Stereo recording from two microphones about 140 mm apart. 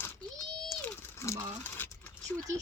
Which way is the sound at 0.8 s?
15° left (ahead or behind).